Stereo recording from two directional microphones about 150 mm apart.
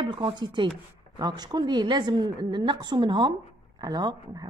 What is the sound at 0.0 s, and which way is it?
A woman's voice, 30° right (ahead or behind).